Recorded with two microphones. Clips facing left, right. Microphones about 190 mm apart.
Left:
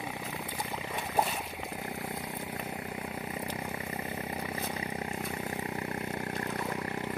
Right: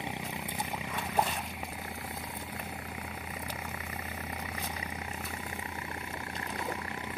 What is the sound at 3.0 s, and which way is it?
Vehicle, 35° left (ahead or behind).